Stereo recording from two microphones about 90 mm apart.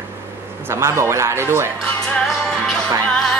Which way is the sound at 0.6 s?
30° right (ahead or behind).